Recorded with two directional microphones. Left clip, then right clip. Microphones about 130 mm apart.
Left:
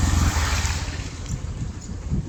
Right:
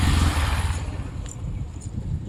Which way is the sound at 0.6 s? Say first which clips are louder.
Left 5 dB; 25° left (ahead or behind).